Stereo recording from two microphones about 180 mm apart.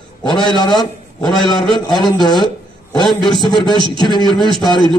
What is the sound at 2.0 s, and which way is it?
A man's voice, 25° left (ahead or behind).